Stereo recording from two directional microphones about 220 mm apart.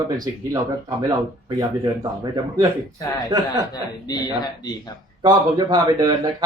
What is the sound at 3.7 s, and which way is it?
Speech, 20° left (ahead or behind).